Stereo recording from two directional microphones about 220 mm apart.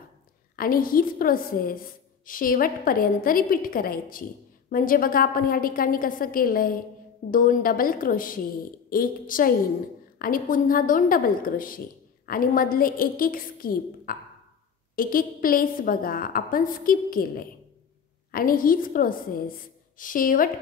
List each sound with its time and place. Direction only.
0.6 s a woman's voice: 40° left (ahead or behind)
18.3 s a woman's voice: 40° left (ahead or behind)